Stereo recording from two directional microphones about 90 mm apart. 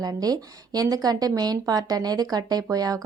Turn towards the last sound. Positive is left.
turn(degrees=-45)  # may be behind; listen again after turning